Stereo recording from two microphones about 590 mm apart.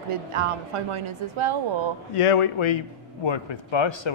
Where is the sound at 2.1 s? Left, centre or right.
Left.